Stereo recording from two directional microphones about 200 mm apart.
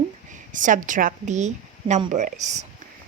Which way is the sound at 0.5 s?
40° right (ahead or behind).